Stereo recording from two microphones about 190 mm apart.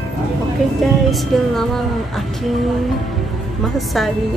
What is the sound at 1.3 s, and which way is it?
Speech, centre (ahead or behind).